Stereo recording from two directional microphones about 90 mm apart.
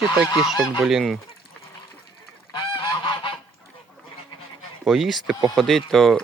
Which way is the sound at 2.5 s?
60° left (ahead or behind).